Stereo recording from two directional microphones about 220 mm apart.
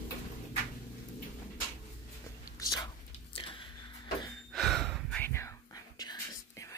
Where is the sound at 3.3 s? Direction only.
20° left (ahead or behind).